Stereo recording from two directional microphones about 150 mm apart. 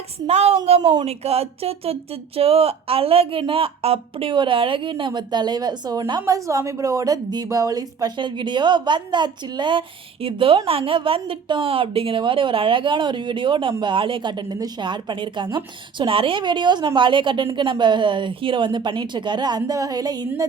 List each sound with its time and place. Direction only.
0.3 s speech: 45° right (ahead or behind)
0.8 s speech: 30° right (ahead or behind)
1.0 s a woman's voice: 45° right (ahead or behind); by 20.1 s 25° right (ahead or behind)